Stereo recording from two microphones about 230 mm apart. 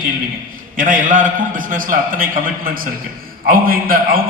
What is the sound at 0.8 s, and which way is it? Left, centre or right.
A man's voice, right.